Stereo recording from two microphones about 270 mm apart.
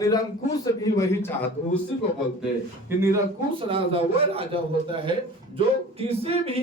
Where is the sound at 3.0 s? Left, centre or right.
Centre.